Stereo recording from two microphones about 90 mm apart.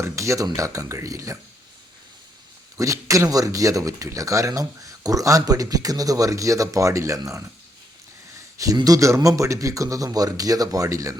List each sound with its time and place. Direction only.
0.0 s speech: 35° right (ahead or behind)
2.7 s speech: 35° right (ahead or behind)
8.5 s speech: 40° right (ahead or behind)